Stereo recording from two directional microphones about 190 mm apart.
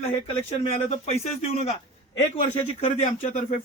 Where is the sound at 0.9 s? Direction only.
35° left (ahead or behind).